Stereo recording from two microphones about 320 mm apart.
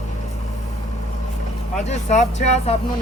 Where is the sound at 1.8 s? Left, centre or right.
Left.